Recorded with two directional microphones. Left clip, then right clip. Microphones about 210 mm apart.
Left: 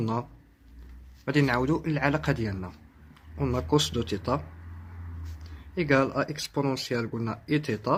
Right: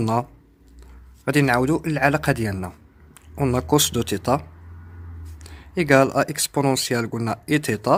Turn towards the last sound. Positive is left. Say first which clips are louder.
# right 7 dB
turn(degrees=-40)  # may be behind; listen again after turning